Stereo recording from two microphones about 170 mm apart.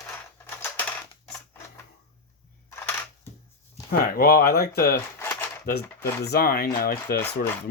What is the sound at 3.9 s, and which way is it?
Speech, 60° left (ahead or behind).